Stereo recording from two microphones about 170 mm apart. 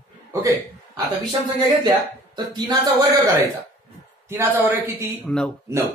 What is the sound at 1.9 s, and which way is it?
Speech, 25° right (ahead or behind).